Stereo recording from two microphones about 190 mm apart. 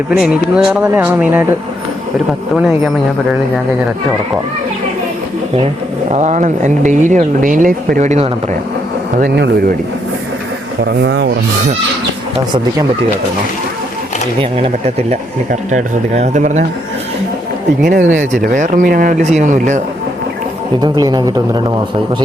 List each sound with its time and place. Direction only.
0.1 s speech: 5° right (ahead or behind)
6.1 s speech: 40° right (ahead or behind)
9.2 s speech: 55° right (ahead or behind)
11.0 s speech: 65° right (ahead or behind)
14.6 s speech: 35° right (ahead or behind)
17.8 s speech: 45° right (ahead or behind)
20.8 s speech: 20° right (ahead or behind)